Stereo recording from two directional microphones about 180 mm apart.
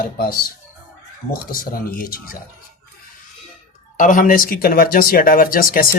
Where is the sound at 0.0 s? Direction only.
55° left (ahead or behind).